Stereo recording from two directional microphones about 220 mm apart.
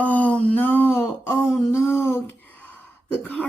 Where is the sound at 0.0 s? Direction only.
5° left (ahead or behind).